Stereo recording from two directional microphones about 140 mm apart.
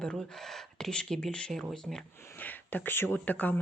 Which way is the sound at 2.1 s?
20° left (ahead or behind).